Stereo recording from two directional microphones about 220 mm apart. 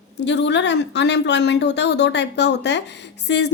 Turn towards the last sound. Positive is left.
turn(degrees=50)  # may be behind; listen again after turning